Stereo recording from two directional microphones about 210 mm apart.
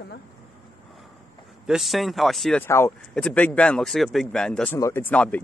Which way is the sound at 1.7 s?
Centre (ahead or behind).